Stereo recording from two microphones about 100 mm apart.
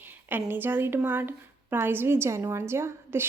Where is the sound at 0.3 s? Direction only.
20° right (ahead or behind).